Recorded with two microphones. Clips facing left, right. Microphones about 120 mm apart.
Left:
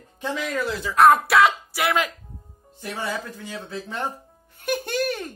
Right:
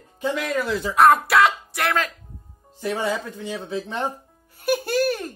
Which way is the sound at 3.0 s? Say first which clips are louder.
Even; 20° right (ahead or behind).